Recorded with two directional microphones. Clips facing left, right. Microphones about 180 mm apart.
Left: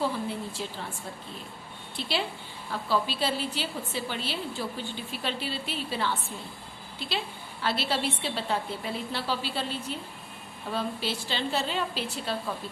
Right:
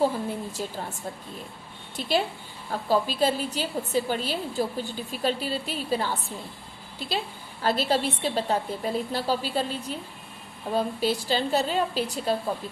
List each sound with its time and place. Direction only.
0.0 s a woman's voice: 45° right (ahead or behind)
2.0 s a woman's voice: 45° right (ahead or behind)
7.6 s a woman's voice: 40° right (ahead or behind)